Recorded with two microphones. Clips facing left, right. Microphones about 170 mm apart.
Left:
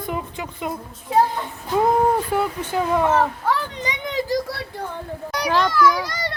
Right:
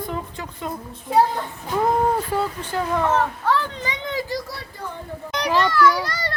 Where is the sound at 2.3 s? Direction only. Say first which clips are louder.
Left 2 dB; 15° left (ahead or behind).